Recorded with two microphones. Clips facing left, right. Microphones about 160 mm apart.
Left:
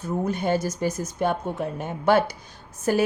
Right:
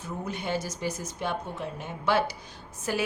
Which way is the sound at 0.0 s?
45° left (ahead or behind).